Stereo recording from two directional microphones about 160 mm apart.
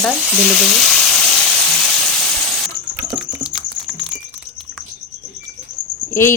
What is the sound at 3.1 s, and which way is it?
Typing, 5° right (ahead or behind).